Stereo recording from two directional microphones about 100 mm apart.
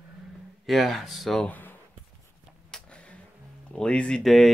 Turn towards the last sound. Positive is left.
turn(degrees=0)  # may be behind; listen again after turning